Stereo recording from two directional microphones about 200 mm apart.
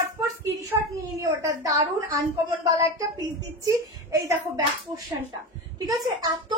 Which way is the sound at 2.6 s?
20° right (ahead or behind).